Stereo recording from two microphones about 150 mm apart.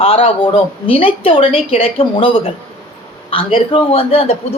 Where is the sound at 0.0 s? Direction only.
40° left (ahead or behind).